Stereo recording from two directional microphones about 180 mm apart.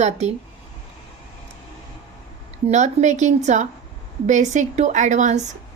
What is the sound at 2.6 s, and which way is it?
A woman's voice, 40° right (ahead or behind).